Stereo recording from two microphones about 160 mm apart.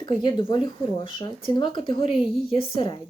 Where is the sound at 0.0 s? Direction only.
30° left (ahead or behind).